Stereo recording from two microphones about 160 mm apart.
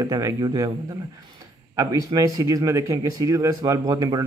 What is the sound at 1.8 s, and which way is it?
Speech, 20° right (ahead or behind).